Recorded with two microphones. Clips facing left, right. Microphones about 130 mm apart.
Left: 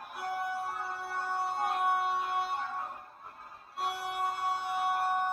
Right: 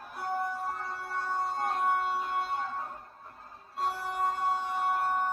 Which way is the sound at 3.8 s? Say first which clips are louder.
Right 2 dB; 70° left (ahead or behind).